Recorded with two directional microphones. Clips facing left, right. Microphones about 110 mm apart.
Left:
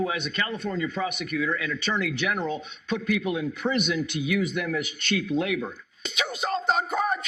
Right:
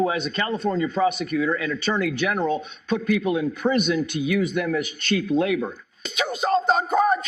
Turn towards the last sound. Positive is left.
turn(degrees=-40)  # may be behind; listen again after turning